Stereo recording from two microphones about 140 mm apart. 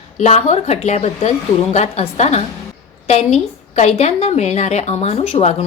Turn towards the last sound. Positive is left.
turn(degrees=50)  # may be behind; listen again after turning